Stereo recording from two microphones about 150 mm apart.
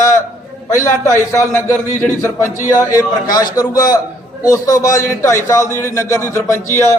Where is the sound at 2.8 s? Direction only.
25° left (ahead or behind).